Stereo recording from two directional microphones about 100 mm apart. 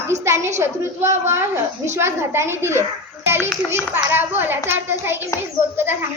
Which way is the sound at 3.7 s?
20° right (ahead or behind).